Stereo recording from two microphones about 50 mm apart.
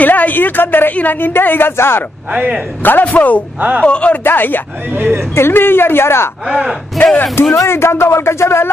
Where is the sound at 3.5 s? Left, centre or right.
Right.